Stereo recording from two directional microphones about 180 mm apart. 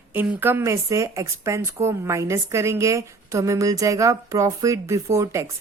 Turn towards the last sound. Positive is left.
turn(degrees=-15)  # may be behind; listen again after turning